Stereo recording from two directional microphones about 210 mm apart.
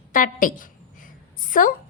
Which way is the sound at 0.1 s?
40° left (ahead or behind).